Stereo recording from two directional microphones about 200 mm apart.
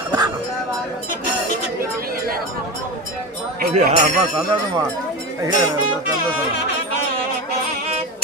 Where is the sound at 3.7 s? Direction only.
35° right (ahead or behind).